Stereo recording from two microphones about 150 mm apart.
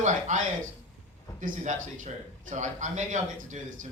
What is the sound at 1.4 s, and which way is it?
A man's voice, 55° right (ahead or behind).